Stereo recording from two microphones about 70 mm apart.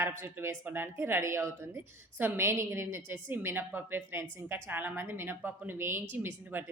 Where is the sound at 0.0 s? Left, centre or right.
Right.